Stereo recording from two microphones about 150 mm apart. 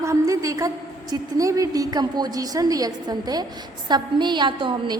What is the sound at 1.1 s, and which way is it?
A woman's voice, 20° right (ahead or behind).